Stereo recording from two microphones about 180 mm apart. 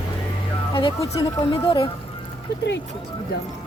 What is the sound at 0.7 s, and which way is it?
Speech, 25° left (ahead or behind).